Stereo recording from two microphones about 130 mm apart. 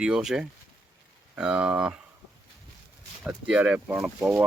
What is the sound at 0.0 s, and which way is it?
Speech, 5° right (ahead or behind).